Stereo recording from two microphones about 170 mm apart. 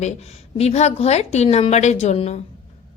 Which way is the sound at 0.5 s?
40° left (ahead or behind).